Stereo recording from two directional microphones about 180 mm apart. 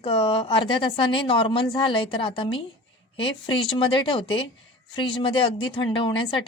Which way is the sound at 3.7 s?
30° left (ahead or behind).